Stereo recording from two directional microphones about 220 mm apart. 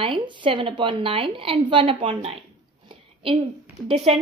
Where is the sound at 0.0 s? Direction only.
20° right (ahead or behind).